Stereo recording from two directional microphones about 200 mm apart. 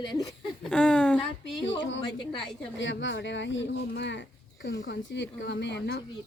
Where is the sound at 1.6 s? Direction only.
65° left (ahead or behind).